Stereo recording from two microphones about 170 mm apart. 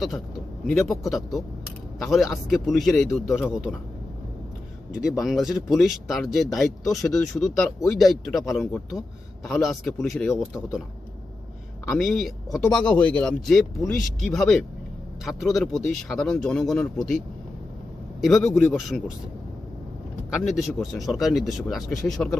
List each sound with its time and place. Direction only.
0.7 s speech: centre (ahead or behind)
4.9 s speech: centre (ahead or behind)
11.9 s speech: centre (ahead or behind)
18.2 s a man's voice: centre (ahead or behind)
20.3 s speech: centre (ahead or behind)